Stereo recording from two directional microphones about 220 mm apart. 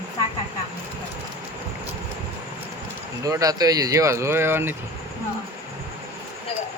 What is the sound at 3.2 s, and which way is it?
Speech, 15° right (ahead or behind).